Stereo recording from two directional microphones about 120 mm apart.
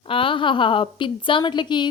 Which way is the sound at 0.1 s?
45° left (ahead or behind).